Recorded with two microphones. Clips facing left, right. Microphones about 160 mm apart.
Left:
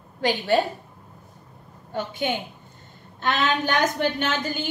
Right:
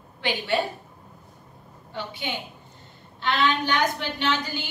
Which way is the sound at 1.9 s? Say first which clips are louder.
Left 6 dB; 50° left (ahead or behind).